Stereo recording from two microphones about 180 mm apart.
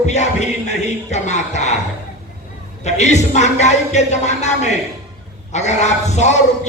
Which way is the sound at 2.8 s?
40° left (ahead or behind).